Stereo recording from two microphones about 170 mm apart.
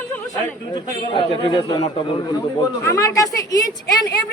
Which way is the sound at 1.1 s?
30° left (ahead or behind).